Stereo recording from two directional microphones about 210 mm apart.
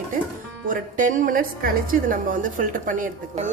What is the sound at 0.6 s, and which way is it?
A woman's voice, 40° right (ahead or behind).